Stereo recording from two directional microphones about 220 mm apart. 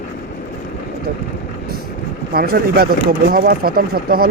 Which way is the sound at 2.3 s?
45° right (ahead or behind).